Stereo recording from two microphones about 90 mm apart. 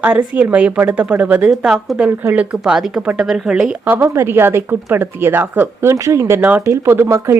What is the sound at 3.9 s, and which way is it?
A woman's voice, 30° right (ahead or behind).